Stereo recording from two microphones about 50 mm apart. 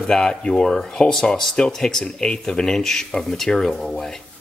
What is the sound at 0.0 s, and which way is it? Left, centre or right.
Speech, centre.